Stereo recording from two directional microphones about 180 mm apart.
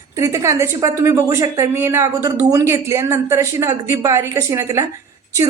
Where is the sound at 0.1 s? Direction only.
15° right (ahead or behind).